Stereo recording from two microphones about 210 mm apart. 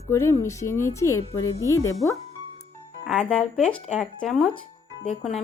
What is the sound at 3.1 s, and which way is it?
Speech, 5° left (ahead or behind).